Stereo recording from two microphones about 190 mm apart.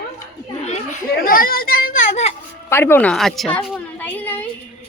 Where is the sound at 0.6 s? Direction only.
35° left (ahead or behind).